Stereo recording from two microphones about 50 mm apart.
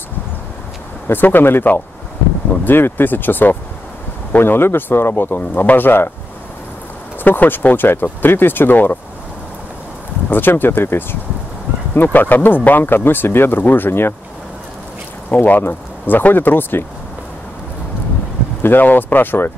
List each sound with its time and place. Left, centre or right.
1.0 s speech: left
7.2 s speech: left
10.3 s speech: left
15.3 s speech: left
18.6 s speech: left